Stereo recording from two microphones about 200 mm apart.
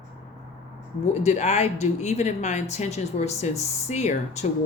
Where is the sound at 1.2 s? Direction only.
35° left (ahead or behind).